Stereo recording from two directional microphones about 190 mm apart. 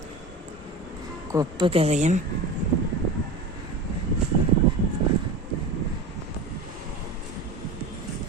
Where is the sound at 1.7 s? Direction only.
35° right (ahead or behind).